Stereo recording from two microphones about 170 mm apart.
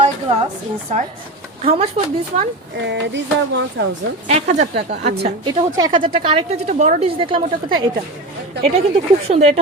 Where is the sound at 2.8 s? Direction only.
90° right.